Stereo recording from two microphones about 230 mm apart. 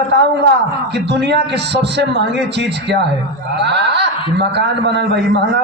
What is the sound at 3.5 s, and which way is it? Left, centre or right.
Speech, right.